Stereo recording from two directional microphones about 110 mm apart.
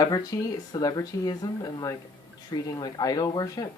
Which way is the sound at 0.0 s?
35° left (ahead or behind).